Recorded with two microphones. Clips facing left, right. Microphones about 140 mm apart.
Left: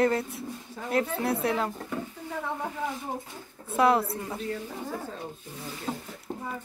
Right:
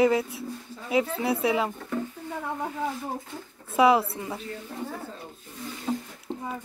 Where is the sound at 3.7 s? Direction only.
Centre (ahead or behind).